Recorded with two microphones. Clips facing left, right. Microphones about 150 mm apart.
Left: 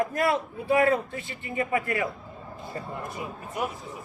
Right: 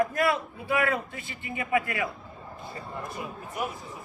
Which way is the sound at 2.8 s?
45° left (ahead or behind).